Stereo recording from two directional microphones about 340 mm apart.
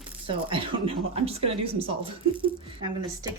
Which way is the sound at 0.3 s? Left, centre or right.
Centre.